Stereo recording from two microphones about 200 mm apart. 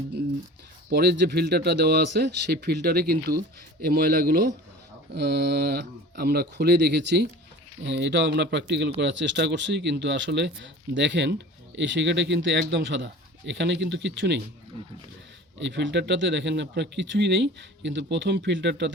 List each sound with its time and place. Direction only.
0.9 s speech: 50° right (ahead or behind)
15.5 s speech: 60° right (ahead or behind)